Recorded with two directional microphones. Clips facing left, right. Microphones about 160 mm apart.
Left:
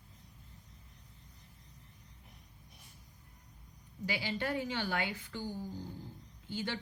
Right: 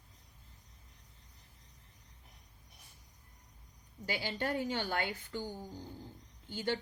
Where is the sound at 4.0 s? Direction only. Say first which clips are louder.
Even; 50° right (ahead or behind).